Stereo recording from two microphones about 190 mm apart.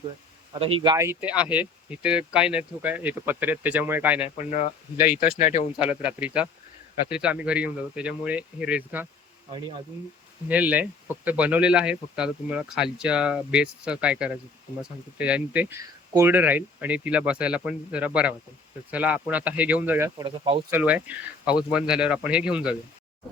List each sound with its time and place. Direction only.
0.6 s speech: 25° right (ahead or behind); by 4.3 s 10° right (ahead or behind)
4.4 s speech: 35° left (ahead or behind)
5.0 s speech: 50° left (ahead or behind)
5.4 s speech: 35° left (ahead or behind)
5.8 s speech: 5° right (ahead or behind)
10.5 s speech: 5° right (ahead or behind)
20.2 s speech: 25° right (ahead or behind)
20.7 s speech: 10° right (ahead or behind)